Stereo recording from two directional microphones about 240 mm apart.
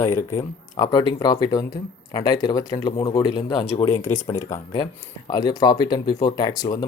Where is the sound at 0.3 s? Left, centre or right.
Centre.